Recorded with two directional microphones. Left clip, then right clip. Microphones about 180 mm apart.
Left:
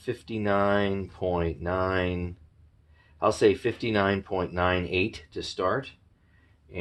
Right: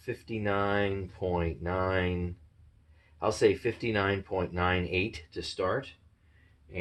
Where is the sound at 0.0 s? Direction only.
40° left (ahead or behind).